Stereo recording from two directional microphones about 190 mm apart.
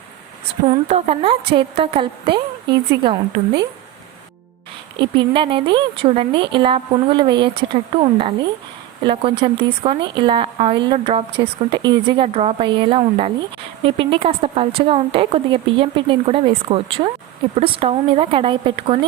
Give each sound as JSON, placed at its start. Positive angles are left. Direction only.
{"t": 0.9, "sound": "speech", "side_deg": -35}
{"t": 4.9, "sound": "speech", "side_deg": -25}
{"t": 9.0, "sound": "speech", "side_deg": -25}